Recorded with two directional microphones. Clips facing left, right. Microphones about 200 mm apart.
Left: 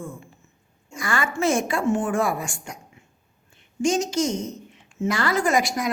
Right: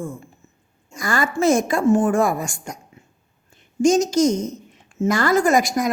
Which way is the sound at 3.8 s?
40° right (ahead or behind).